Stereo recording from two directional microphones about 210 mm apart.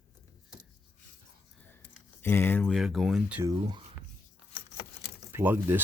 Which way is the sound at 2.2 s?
10° left (ahead or behind).